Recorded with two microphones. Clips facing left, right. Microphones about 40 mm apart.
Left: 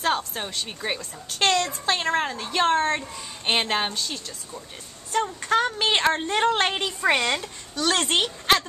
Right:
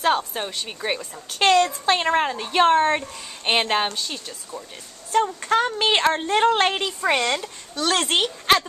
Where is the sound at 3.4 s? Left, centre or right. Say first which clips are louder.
Right 3 dB; centre.